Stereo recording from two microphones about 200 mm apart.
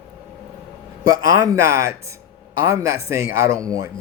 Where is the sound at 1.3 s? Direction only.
15° right (ahead or behind).